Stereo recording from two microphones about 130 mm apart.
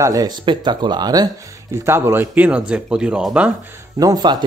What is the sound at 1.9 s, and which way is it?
Speech, 20° right (ahead or behind).